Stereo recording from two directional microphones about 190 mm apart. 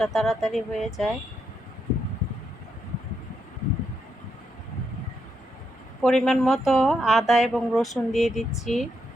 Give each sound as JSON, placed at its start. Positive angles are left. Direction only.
{"t": 0.0, "sound": "speech", "side_deg": 0}
{"t": 6.0, "sound": "speech", "side_deg": 0}